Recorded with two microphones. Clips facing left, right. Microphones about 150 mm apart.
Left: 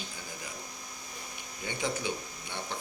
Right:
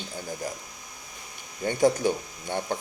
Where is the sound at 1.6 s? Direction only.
45° right (ahead or behind).